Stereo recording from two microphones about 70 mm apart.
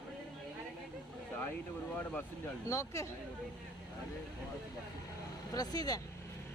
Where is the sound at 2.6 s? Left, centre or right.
Left.